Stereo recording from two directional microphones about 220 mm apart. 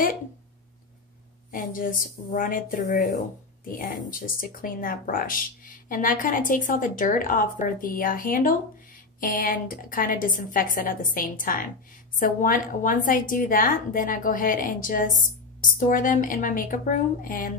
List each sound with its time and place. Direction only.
1.5 s speech: 40° left (ahead or behind)